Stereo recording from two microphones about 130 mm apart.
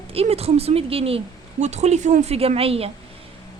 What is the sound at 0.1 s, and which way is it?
A woman's voice, 50° right (ahead or behind).